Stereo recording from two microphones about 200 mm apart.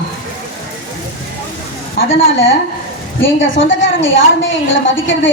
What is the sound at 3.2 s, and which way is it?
A woman's voice, 70° left (ahead or behind).